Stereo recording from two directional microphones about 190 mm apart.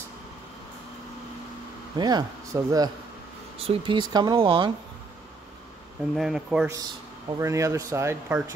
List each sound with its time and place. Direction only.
2.0 s speech: 20° right (ahead or behind)
6.1 s speech: centre (ahead or behind)
6.7 s speech: 20° right (ahead or behind)